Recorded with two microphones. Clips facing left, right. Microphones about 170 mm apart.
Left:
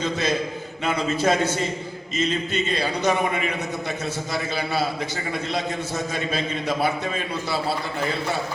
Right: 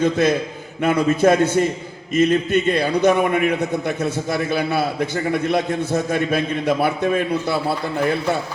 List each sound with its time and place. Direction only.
0.0 s a man's voice: 55° right (ahead or behind)